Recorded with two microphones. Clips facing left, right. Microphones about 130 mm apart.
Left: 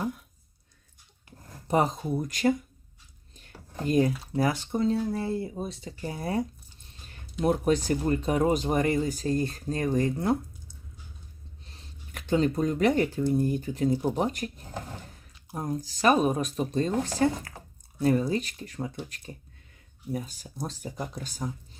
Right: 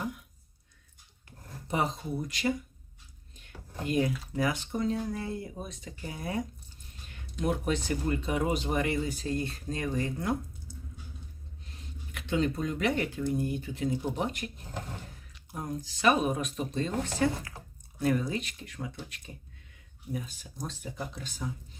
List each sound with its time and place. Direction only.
1.6 s speech: 40° left (ahead or behind)
7.4 s speech: 40° left (ahead or behind)
11.6 s speech: 35° left (ahead or behind)
15.5 s speech: 35° left (ahead or behind)